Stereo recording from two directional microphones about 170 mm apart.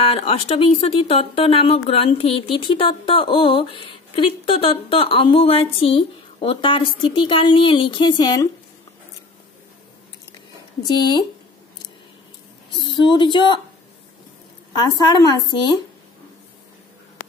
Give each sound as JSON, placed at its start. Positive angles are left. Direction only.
{"t": 0.0, "sound": "speech", "side_deg": 35}
{"t": 12.7, "sound": "speech", "side_deg": 25}
{"t": 14.7, "sound": "a woman's voice", "side_deg": 25}